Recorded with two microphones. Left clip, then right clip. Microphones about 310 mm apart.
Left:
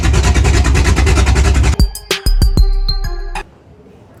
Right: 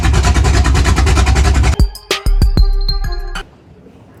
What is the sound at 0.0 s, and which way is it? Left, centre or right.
Vehicle, centre.